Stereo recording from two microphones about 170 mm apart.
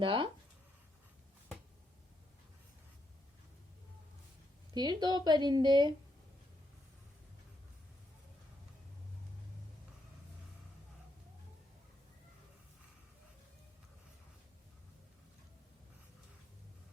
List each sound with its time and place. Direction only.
0.0 s speech: 30° right (ahead or behind)
4.7 s speech: 25° right (ahead or behind)